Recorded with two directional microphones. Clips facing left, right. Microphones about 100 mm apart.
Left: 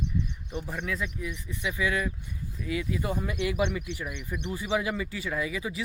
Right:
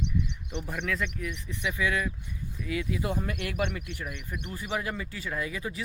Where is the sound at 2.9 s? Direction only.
Centre (ahead or behind).